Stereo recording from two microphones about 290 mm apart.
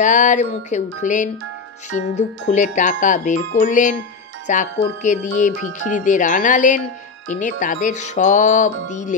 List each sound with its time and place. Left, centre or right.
0.0 s speech: left